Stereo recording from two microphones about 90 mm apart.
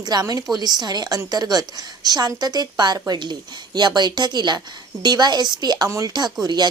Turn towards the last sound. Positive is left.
turn(degrees=-50)  # may be behind; listen again after turning